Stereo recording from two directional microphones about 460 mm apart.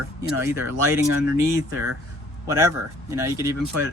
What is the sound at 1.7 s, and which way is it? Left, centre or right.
Speech, right.